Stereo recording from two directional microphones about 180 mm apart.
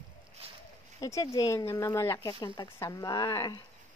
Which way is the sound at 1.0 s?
20° left (ahead or behind).